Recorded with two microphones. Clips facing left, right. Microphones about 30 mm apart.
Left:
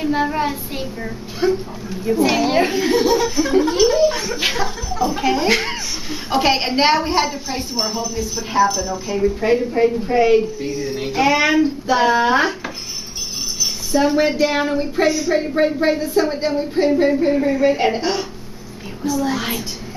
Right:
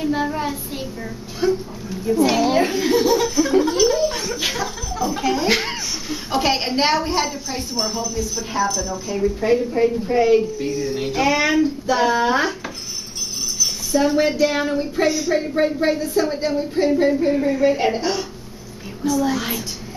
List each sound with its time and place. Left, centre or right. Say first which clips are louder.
0.0 s a woman's voice: left 3 dB; centre
4.4 s speech: left 3 dB; left
5.5 s speech: left 2 dB; centre
6.0 s a woman's voice: left 3 dB; centre
13.9 s a woman's voice: left 1 dB; centre
15.0 s speech: left 2 dB; centre
15.3 s a woman's voice: left 2 dB; centre